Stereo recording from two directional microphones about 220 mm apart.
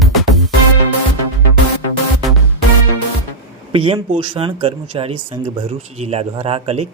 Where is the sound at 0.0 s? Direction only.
Centre (ahead or behind).